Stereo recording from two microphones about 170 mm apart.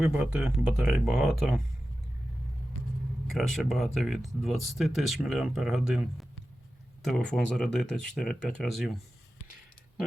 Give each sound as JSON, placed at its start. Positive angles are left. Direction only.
{"t": 0.0, "sound": "speech", "side_deg": -5}
{"t": 3.2, "sound": "speech", "side_deg": 0}